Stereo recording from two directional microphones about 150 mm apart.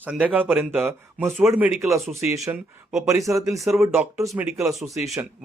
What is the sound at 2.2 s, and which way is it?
A man's voice, 20° right (ahead or behind).